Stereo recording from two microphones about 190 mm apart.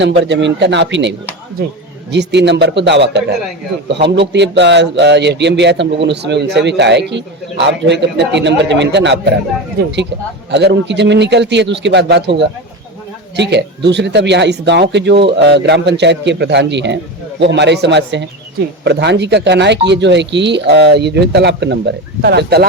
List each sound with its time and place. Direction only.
0.0 s a man's voice: 70° right (ahead or behind)
2.1 s speech: 65° right (ahead or behind)
4.3 s a man's voice: 65° right (ahead or behind)
10.5 s speech: 65° right (ahead or behind)